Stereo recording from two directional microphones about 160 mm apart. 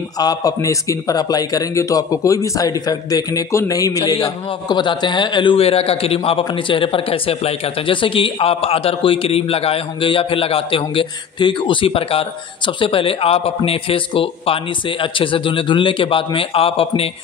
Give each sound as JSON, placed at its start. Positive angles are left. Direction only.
{"t": 0.2, "sound": "a man's voice", "side_deg": 25}